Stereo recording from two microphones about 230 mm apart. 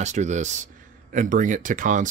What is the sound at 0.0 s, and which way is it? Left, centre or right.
Speech, right.